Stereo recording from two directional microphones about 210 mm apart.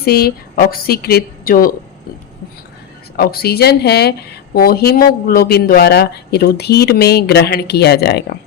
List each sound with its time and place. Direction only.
0.0 s speech: 50° left (ahead or behind)
3.2 s speech: 45° left (ahead or behind)